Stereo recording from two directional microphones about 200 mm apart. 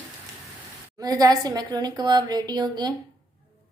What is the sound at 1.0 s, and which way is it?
A woman's voice, 20° right (ahead or behind).